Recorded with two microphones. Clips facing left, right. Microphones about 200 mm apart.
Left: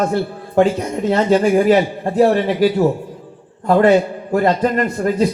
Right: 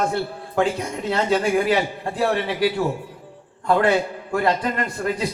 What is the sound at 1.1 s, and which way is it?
A man's voice, 40° left (ahead or behind).